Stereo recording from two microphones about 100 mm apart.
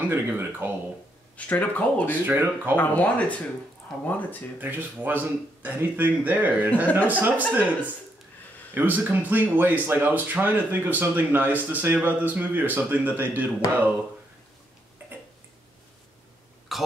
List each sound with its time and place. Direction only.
0.0 s speech: 20° right (ahead or behind)
1.3 s speech: 15° left (ahead or behind)
2.2 s speech: 20° right (ahead or behind)
2.7 s speech: 15° left (ahead or behind)
4.6 s speech: 20° right (ahead or behind)
16.7 s a sound: centre (ahead or behind)